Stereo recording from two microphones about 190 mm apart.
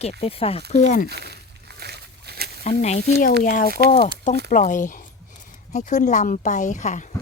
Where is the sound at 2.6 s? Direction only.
35° left (ahead or behind).